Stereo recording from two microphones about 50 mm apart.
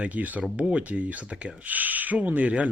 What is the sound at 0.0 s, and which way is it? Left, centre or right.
Speech, right.